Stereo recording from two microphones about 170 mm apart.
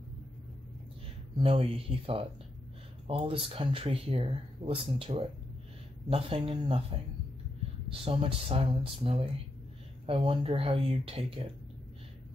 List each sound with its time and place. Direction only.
1.4 s speech: 35° right (ahead or behind)